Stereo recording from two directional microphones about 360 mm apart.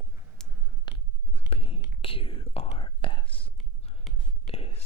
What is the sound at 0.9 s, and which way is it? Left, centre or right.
Biting, centre.